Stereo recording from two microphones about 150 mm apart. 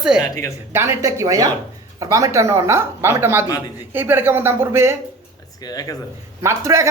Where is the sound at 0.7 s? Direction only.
20° right (ahead or behind).